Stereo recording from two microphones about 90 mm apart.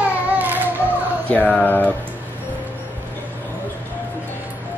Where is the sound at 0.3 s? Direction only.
20° right (ahead or behind).